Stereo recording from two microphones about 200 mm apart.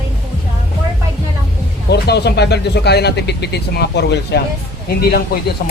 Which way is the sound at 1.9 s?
55° left (ahead or behind).